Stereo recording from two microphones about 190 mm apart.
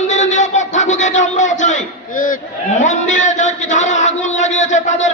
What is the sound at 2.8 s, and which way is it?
A man's voice, 40° left (ahead or behind).